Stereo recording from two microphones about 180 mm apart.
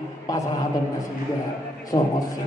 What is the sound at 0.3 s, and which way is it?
Speech, 20° left (ahead or behind).